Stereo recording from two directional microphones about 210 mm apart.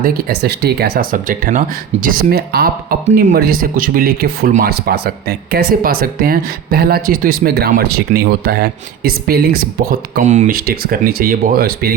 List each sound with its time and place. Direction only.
0.0 s speech: 45° right (ahead or behind)